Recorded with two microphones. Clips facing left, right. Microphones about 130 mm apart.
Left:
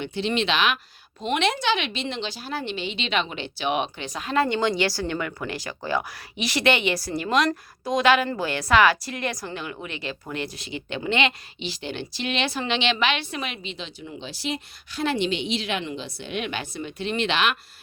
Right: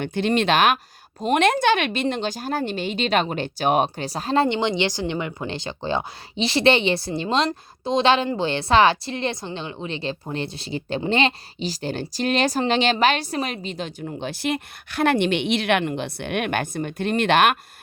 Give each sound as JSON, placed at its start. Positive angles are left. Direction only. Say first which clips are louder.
{"t": 0.0, "sound": "a woman's voice", "louder": "right 4 dB", "side_deg": -50}